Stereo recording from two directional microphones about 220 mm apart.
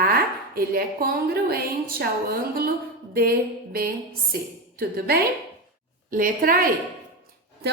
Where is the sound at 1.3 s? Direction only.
45° right (ahead or behind).